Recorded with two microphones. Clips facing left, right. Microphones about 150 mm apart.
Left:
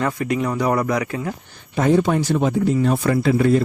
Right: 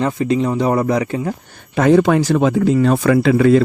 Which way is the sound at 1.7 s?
80° right.